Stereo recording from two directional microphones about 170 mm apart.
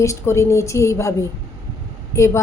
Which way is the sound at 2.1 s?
15° left (ahead or behind).